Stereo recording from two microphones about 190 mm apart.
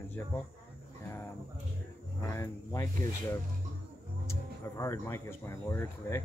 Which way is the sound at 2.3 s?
15° left (ahead or behind).